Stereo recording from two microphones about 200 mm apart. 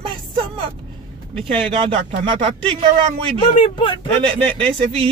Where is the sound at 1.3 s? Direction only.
25° right (ahead or behind).